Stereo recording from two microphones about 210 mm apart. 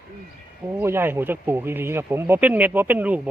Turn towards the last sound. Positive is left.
turn(degrees=-10)  # may be behind; listen again after turning